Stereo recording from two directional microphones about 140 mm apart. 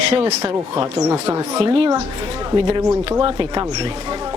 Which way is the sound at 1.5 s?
45° right (ahead or behind).